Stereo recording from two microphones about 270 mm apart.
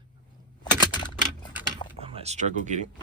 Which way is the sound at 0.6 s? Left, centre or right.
Centre.